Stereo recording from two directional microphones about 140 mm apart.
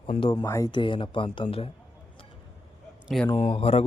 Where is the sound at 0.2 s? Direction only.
35° left (ahead or behind).